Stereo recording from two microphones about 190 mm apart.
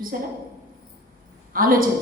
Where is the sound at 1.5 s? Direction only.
50° right (ahead or behind).